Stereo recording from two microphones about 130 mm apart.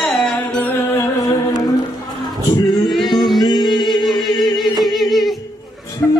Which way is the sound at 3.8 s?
Centre (ahead or behind).